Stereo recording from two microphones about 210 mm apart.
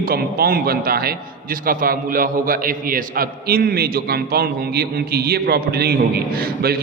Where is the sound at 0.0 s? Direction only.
45° right (ahead or behind).